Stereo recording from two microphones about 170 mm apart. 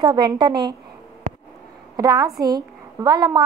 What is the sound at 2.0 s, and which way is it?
A woman's voice, 20° right (ahead or behind).